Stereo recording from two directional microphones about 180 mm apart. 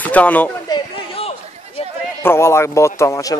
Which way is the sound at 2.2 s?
15° left (ahead or behind).